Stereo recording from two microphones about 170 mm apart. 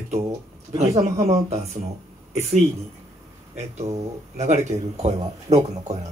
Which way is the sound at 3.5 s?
40° right (ahead or behind).